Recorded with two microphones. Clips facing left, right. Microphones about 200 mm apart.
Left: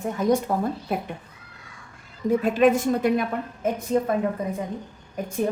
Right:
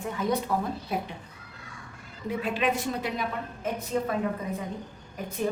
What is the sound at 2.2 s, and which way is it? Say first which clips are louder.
A woman's voice: left 9 dB; 45° left (ahead or behind).